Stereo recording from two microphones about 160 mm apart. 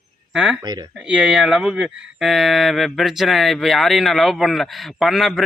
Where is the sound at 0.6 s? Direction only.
25° right (ahead or behind).